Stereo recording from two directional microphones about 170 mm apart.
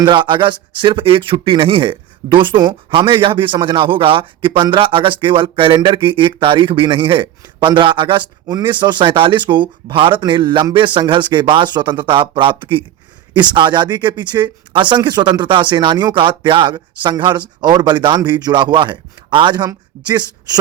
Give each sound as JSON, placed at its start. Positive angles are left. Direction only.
{"t": 0.0, "sound": "speech", "side_deg": -30}